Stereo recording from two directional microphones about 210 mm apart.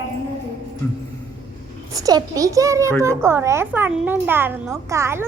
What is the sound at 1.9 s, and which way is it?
A woman's voice, 15° right (ahead or behind).